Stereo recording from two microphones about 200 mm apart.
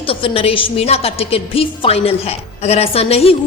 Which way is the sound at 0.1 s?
30° left (ahead or behind).